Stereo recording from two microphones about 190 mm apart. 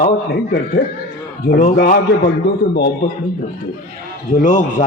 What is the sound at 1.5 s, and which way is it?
Speech, 50° left (ahead or behind).